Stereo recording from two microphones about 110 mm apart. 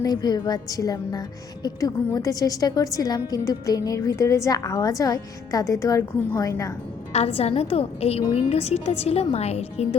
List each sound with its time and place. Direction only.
0.0 s a woman's voice: 40° left (ahead or behind)
7.3 s a woman's voice: 65° left (ahead or behind)